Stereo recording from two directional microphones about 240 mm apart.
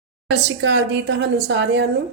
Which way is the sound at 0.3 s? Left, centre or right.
Right.